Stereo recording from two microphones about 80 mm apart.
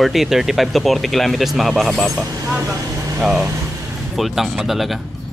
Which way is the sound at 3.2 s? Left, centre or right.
Centre.